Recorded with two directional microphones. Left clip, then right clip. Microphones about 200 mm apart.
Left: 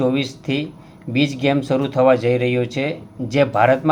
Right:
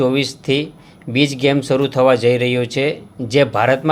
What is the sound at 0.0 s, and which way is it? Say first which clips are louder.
Speech: right 3 dB; 40° right (ahead or behind).